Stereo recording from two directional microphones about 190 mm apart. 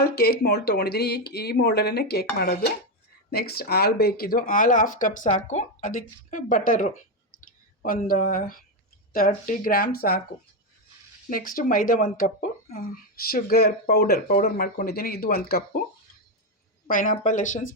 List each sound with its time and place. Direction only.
0.0 s speech: 55° left (ahead or behind)
11.3 s speech: 50° left (ahead or behind)
16.9 s speech: 45° left (ahead or behind)